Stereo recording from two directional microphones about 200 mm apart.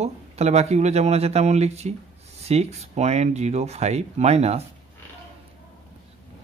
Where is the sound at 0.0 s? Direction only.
35° right (ahead or behind).